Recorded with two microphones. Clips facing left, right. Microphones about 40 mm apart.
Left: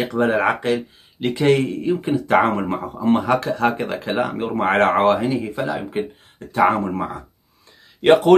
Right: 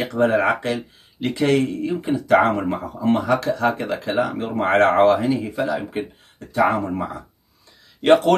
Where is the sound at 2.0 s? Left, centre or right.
Left.